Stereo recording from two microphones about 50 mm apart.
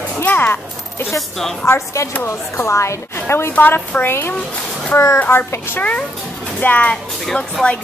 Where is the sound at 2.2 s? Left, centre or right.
Left.